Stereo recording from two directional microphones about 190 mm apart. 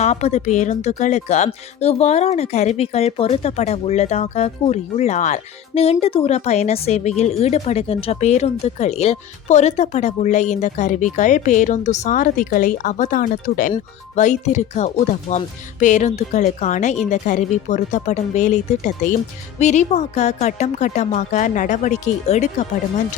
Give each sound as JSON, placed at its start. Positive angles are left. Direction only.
{"t": 0.0, "sound": "speech", "side_deg": 35}